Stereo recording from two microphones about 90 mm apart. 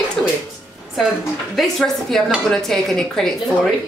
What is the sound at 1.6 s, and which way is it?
Speech, centre (ahead or behind).